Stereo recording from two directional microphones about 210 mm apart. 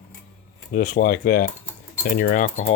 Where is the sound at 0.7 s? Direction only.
50° left (ahead or behind).